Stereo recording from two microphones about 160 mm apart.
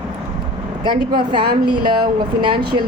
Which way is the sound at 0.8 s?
30° right (ahead or behind).